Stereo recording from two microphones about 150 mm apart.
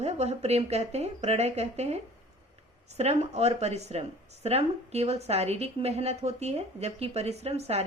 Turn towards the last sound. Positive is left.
turn(degrees=-45)  # may be behind; listen again after turning